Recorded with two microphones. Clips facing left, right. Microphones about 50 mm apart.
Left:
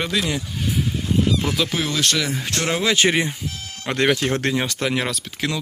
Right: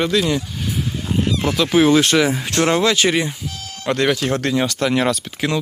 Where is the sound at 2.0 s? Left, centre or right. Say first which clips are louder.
Right 6 dB; right.